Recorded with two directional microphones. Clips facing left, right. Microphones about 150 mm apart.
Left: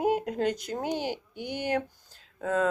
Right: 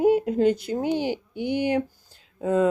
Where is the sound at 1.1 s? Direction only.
55° right (ahead or behind).